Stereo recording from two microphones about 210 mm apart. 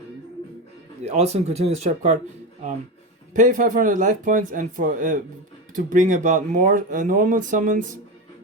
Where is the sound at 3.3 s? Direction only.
40° right (ahead or behind).